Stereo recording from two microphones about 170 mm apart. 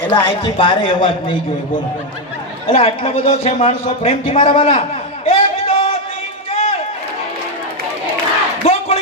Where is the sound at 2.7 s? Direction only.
35° left (ahead or behind).